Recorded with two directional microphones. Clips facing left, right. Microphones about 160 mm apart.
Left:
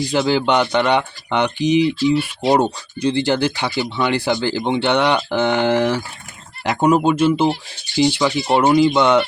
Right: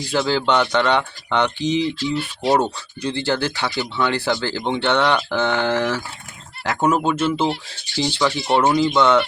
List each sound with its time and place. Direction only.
0.1 s speech: 15° left (ahead or behind)